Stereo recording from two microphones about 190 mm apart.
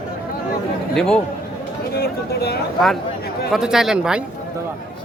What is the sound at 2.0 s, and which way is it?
Speech, 55° left (ahead or behind).